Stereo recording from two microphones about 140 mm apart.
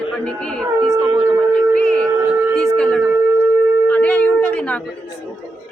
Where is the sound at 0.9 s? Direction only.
20° right (ahead or behind).